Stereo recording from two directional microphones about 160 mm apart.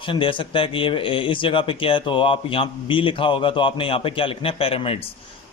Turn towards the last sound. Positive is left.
turn(degrees=35)  # may be behind; listen again after turning